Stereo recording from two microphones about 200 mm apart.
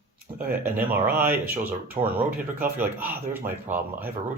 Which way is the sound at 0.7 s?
10° right (ahead or behind).